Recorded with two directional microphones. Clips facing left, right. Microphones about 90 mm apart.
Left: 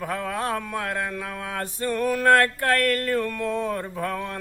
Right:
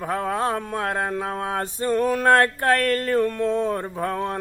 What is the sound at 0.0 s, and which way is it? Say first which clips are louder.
Mantra: right 4 dB; 30° right (ahead or behind).